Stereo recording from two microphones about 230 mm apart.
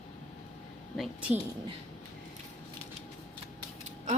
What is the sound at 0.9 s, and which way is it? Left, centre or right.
Speech, centre.